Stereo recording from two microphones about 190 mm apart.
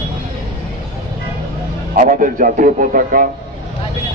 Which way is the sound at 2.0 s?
45° right (ahead or behind).